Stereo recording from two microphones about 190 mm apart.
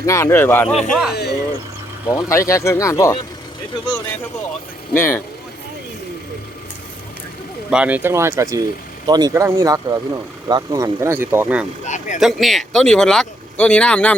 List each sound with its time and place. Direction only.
0.0 s speech: 15° left (ahead or behind)
0.7 s speech: centre (ahead or behind)
1.1 s speech: 60° left (ahead or behind)
2.0 s speech: 15° left (ahead or behind)
4.9 s speech: 10° left (ahead or behind)
7.7 s speech: 5° right (ahead or behind)
11.9 s speech: 40° left (ahead or behind)
12.2 s speech: centre (ahead or behind)